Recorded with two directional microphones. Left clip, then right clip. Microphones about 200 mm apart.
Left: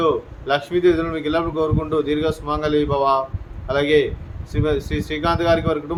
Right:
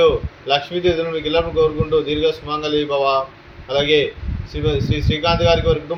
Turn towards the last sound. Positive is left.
turn(degrees=20)  # may be behind; listen again after turning